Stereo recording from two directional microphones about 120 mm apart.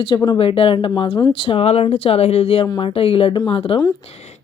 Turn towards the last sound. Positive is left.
turn(degrees=70)  # may be behind; listen again after turning